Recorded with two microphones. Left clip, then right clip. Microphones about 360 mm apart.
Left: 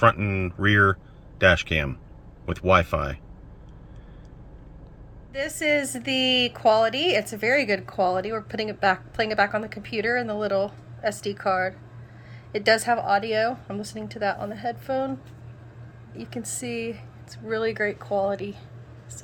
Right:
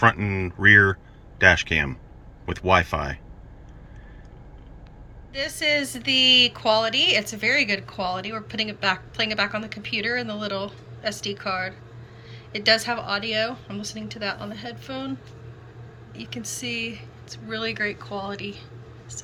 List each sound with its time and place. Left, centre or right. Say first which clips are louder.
0.0 s speech: even; centre
5.3 s a woman's voice: even; centre
16.1 s a woman's voice: right 1 dB; centre